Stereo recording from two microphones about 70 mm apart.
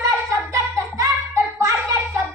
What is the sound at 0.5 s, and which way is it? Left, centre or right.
Child singing, right.